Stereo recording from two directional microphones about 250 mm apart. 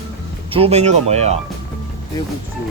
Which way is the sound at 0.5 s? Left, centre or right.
Right.